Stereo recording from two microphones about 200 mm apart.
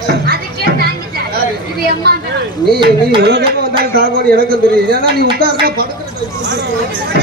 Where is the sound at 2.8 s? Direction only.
55° right (ahead or behind).